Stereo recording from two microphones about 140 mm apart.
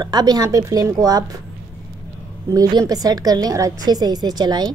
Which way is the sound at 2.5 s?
25° right (ahead or behind).